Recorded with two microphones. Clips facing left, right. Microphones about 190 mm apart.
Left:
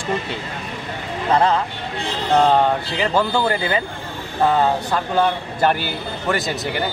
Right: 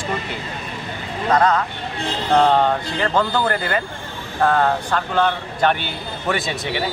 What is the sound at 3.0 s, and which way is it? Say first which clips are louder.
A man's voice: left 1 dB; 10° left (ahead or behind).